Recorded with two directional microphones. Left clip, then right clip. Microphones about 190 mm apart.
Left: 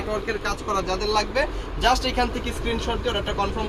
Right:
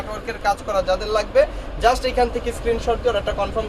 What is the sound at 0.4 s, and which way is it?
Speech, 45° right (ahead or behind).